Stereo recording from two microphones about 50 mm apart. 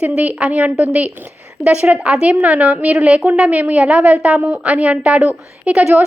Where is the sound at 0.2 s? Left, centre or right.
Right.